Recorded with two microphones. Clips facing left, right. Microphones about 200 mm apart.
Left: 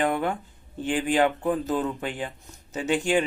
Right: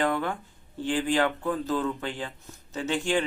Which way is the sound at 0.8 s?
20° left (ahead or behind).